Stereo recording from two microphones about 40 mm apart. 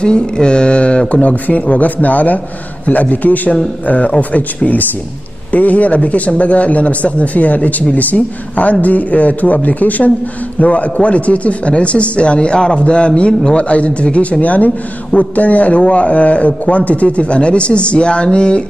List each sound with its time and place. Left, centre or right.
0.0 s a man's voice: left
1.3 s speech: left
5.5 s a man's voice: left
14.4 s a man's voice: left